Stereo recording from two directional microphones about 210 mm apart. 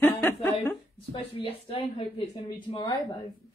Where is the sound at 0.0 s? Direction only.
10° left (ahead or behind).